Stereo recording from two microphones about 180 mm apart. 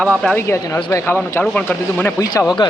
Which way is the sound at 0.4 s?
15° left (ahead or behind).